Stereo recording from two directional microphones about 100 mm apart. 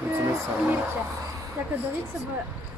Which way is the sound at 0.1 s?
25° right (ahead or behind).